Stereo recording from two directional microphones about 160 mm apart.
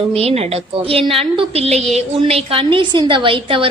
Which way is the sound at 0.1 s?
40° right (ahead or behind).